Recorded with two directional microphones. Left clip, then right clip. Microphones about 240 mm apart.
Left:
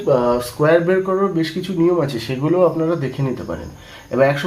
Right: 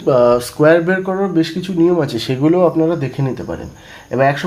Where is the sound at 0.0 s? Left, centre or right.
Right.